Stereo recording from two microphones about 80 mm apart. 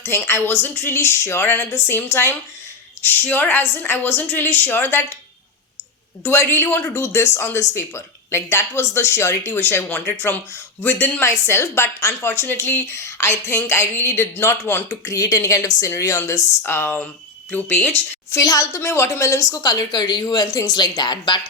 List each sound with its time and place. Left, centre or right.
0.3 s a woman's voice: left
6.2 s speech: left
14.8 s a woman's voice: left
16.6 s a woman's voice: left
18.3 s a woman's voice: left
18.8 s speech: left